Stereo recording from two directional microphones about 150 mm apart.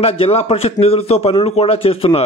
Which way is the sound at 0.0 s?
40° left (ahead or behind).